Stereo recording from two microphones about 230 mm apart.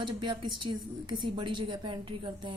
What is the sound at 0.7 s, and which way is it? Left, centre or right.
Speech, right.